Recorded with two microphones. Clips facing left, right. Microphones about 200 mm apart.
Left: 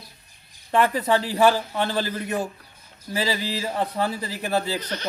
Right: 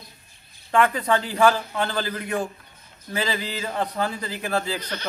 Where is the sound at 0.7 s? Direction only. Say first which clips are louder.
Even; 30° left (ahead or behind).